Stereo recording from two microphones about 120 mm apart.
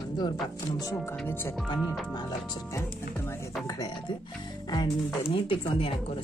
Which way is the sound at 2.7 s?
20° left (ahead or behind).